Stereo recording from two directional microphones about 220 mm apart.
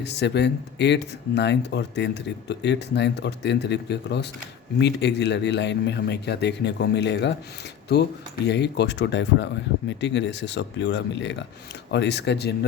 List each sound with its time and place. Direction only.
0.0 s speech: 50° left (ahead or behind)